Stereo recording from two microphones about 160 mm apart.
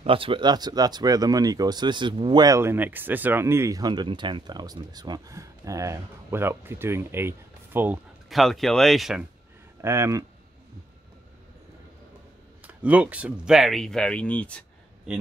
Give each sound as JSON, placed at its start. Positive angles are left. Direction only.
{"t": 0.0, "sound": "speech", "side_deg": -35}
{"t": 8.3, "sound": "speech", "side_deg": 0}
{"t": 9.8, "sound": "speech", "side_deg": -15}
{"t": 12.6, "sound": "speech", "side_deg": -10}